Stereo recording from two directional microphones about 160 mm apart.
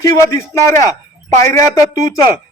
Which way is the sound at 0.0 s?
20° left (ahead or behind).